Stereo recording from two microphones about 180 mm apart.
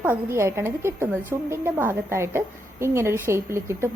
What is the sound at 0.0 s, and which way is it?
A woman's voice, 10° right (ahead or behind).